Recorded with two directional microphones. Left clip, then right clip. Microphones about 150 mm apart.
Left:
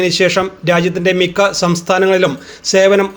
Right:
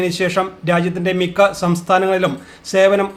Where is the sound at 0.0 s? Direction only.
20° left (ahead or behind).